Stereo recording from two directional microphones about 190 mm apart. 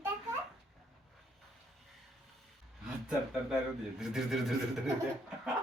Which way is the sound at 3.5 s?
Centre (ahead or behind).